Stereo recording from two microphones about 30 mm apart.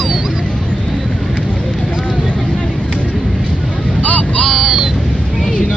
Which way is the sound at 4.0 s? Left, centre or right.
Left.